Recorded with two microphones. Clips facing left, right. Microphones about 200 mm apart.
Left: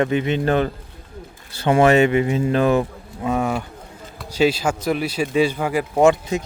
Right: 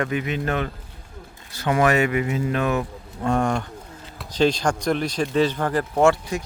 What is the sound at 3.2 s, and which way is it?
Speech, 5° left (ahead or behind).